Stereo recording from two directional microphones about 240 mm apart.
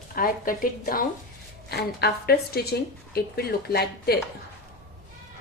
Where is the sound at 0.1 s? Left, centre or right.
Left.